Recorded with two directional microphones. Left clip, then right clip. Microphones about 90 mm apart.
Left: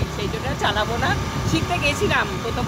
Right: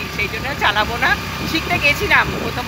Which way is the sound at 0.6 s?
30° right (ahead or behind).